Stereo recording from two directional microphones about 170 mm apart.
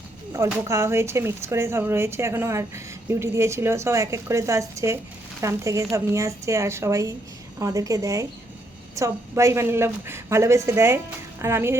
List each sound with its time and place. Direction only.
0.7 s a woman's voice: 15° right (ahead or behind)